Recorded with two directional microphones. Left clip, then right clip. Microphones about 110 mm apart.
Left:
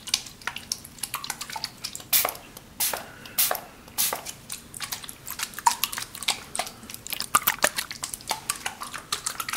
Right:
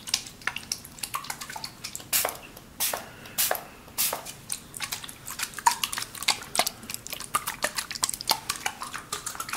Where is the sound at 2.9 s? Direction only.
15° left (ahead or behind).